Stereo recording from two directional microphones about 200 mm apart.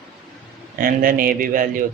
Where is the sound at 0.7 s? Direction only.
45° right (ahead or behind).